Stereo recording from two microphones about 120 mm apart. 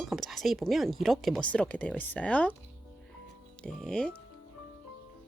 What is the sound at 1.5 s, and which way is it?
Speech, 10° left (ahead or behind).